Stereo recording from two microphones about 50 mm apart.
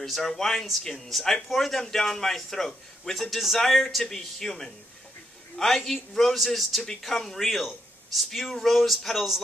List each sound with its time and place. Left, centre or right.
0.0 s a man's voice: centre